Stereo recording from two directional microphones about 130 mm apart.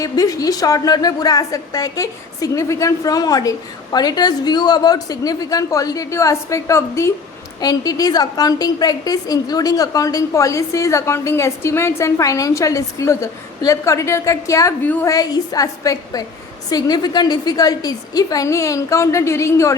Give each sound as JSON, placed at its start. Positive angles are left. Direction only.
{"t": 0.0, "sound": "a woman's voice", "side_deg": 25}
{"t": 15.0, "sound": "a woman's voice", "side_deg": 30}